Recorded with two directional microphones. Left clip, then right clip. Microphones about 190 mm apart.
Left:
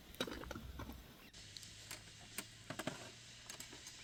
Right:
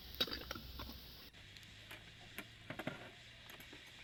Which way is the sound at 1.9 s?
15° right (ahead or behind).